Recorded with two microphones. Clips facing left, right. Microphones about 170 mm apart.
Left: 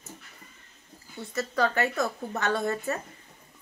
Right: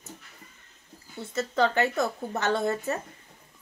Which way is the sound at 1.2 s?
20° right (ahead or behind).